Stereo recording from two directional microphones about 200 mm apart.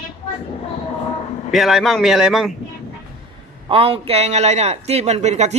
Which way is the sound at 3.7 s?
25° right (ahead or behind).